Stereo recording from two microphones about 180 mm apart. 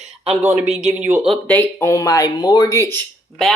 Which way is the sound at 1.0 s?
10° right (ahead or behind).